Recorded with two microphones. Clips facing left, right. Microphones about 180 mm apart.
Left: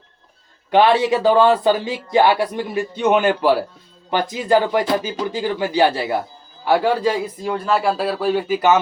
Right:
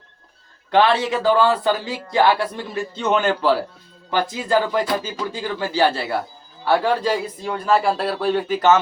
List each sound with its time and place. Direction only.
0.7 s speech: 15° left (ahead or behind)